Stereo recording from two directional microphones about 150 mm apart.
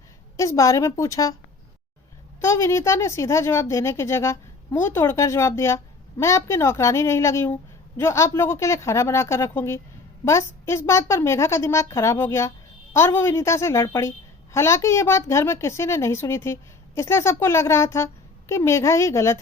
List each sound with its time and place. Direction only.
0.3 s a woman's voice: 20° left (ahead or behind)
2.4 s a woman's voice: 20° left (ahead or behind)